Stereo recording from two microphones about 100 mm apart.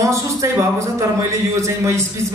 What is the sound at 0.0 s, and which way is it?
A man's voice, 30° right (ahead or behind).